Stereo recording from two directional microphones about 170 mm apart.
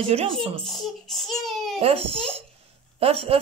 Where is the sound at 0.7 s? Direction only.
Centre (ahead or behind).